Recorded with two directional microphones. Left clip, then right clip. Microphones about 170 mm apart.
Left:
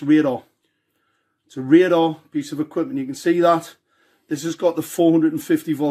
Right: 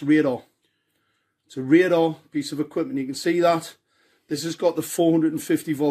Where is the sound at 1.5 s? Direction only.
25° right (ahead or behind).